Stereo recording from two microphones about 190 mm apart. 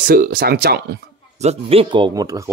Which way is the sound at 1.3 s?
35° right (ahead or behind).